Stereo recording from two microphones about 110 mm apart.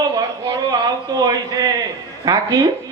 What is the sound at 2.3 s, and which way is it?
Speech, 35° right (ahead or behind).